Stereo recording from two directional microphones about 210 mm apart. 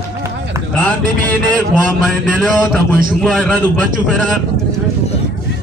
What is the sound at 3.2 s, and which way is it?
Speech, 5° left (ahead or behind).